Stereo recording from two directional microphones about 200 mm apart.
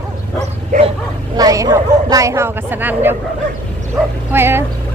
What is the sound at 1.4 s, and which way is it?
Speech, 20° right (ahead or behind).